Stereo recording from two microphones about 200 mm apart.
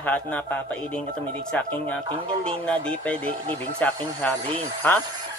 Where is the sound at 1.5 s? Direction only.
5° left (ahead or behind).